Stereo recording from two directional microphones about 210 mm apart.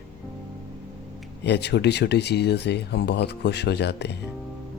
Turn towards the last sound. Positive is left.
turn(degrees=50)  # may be behind; listen again after turning